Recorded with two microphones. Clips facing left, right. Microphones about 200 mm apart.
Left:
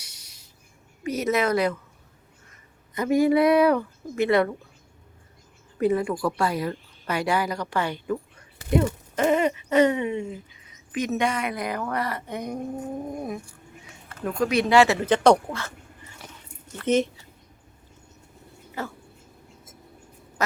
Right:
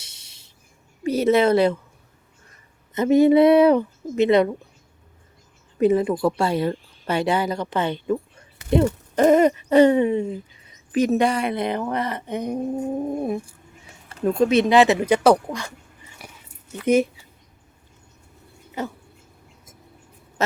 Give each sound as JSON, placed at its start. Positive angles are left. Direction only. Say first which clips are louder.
{"t": 0.0, "sound": "a sound", "louder": "even", "side_deg": -25}
{"t": 1.0, "sound": "a woman's voice", "louder": "right 6 dB", "side_deg": -30}
{"t": 2.9, "sound": "a woman's voice", "louder": "right 5 dB", "side_deg": -25}
{"t": 5.7, "sound": "a woman's voice", "louder": "right 5 dB", "side_deg": -20}
{"t": 9.1, "sound": "a woman's voice", "louder": "right 7 dB", "side_deg": -40}
{"t": 16.2, "sound": "a sound", "louder": "right 2 dB", "side_deg": -10}
{"t": 16.7, "sound": "speech", "louder": "right 4 dB", "side_deg": -10}
{"t": 18.8, "sound": "a woman's voice", "louder": "right 4 dB", "side_deg": -20}